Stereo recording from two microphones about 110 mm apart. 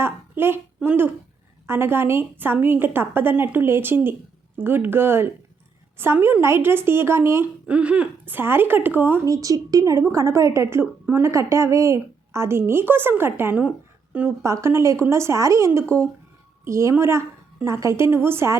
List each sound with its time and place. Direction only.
0.0 s a sound: 20° right (ahead or behind)
0.8 s a woman's voice: 15° right (ahead or behind)
7.7 s speech: 10° right (ahead or behind)
9.2 s a woman's voice: 30° right (ahead or behind); by 14.3 s 15° right (ahead or behind)
14.4 s a woman's voice: 25° right (ahead or behind)